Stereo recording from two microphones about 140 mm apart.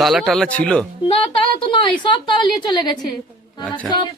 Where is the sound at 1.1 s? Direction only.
40° left (ahead or behind).